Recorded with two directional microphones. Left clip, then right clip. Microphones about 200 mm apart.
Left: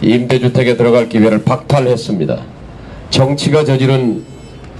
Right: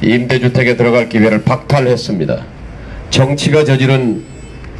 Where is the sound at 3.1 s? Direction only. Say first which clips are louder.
Even; 30° right (ahead or behind).